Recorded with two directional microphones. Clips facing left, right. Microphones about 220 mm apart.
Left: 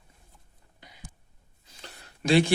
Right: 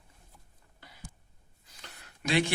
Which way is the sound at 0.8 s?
20° left (ahead or behind).